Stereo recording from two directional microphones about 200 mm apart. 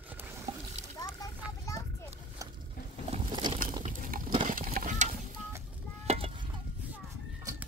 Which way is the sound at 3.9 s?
40° right (ahead or behind).